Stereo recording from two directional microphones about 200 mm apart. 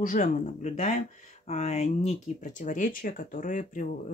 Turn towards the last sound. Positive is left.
turn(degrees=40)  # may be behind; listen again after turning